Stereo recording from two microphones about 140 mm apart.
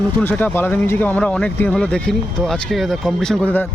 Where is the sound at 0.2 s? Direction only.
10° left (ahead or behind).